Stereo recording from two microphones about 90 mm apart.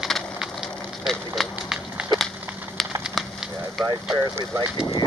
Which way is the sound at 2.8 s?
Centre (ahead or behind).